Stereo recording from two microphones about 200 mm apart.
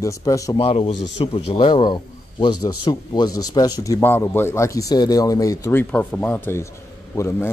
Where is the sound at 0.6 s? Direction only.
25° left (ahead or behind).